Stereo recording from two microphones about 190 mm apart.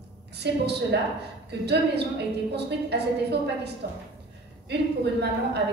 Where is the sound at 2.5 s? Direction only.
60° right (ahead or behind).